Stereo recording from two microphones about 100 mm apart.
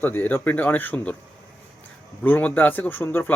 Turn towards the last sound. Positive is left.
turn(degrees=20)  # may be behind; listen again after turning